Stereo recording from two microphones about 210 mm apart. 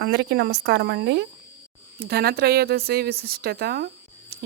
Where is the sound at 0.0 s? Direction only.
55° right (ahead or behind).